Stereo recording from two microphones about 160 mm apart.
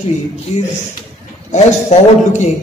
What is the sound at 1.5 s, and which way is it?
A man's voice, 45° left (ahead or behind).